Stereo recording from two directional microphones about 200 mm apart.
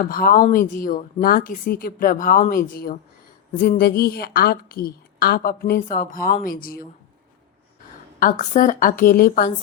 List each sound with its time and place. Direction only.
0.0 s a woman's voice: 45° left (ahead or behind)
8.2 s a woman's voice: 40° left (ahead or behind)